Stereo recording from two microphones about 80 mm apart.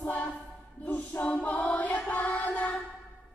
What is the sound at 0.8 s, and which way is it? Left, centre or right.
Music, centre.